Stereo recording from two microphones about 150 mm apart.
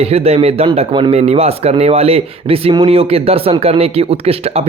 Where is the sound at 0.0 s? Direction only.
40° right (ahead or behind).